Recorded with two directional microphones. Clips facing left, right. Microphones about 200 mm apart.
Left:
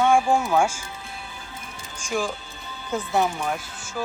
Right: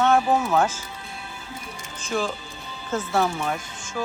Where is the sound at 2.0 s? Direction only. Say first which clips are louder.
Even; 10° left (ahead or behind).